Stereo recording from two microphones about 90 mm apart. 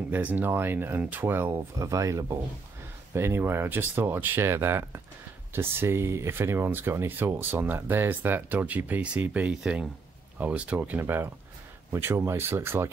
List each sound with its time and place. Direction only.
0.1 s speech: 20° right (ahead or behind)
1.8 s speech: 35° right (ahead or behind)